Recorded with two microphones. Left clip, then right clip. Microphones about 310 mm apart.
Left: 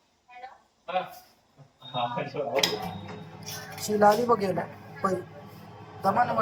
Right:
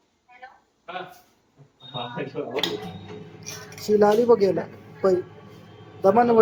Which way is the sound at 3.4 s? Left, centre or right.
Centre.